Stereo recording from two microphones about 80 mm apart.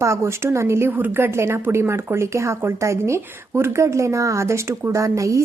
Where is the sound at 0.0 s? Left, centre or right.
Right.